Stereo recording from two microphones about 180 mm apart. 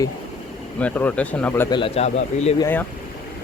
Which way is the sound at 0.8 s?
10° left (ahead or behind).